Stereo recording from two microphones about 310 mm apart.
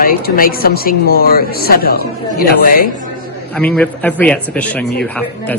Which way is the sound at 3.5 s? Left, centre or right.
Centre.